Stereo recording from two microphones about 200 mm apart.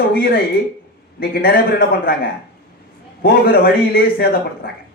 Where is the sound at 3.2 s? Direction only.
50° left (ahead or behind).